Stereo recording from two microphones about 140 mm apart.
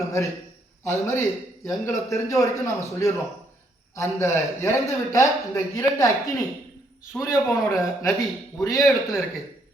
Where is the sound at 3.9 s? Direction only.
20° left (ahead or behind).